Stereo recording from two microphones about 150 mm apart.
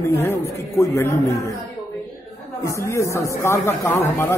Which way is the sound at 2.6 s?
20° left (ahead or behind).